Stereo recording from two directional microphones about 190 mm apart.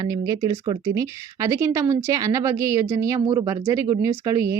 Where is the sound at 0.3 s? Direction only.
20° right (ahead or behind).